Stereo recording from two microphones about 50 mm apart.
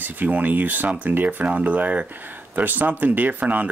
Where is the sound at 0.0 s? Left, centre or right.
Right.